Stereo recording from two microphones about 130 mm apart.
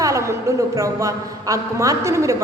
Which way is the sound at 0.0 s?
25° right (ahead or behind).